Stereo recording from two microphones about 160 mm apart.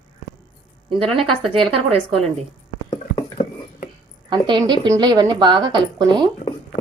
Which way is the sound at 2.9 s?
45° left (ahead or behind).